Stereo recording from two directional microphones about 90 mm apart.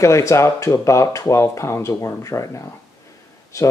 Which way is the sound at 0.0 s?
35° left (ahead or behind).